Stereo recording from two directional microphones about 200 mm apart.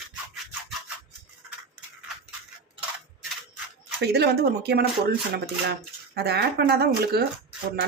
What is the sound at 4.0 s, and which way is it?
Speech, 55° right (ahead or behind).